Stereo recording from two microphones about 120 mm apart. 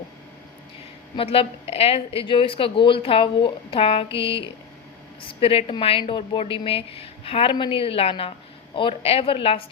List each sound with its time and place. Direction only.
1.1 s a woman's voice: 50° left (ahead or behind)